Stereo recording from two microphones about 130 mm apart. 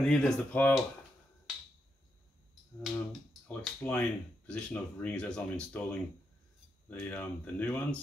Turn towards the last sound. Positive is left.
turn(degrees=15)  # may be behind; listen again after turning